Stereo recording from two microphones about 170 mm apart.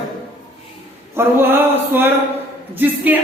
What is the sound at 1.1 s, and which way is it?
Speech, 15° right (ahead or behind).